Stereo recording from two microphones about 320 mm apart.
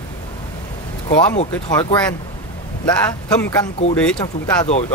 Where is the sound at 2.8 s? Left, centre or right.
Centre.